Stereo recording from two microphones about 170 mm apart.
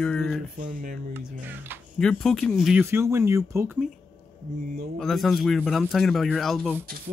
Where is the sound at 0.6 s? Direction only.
55° right (ahead or behind).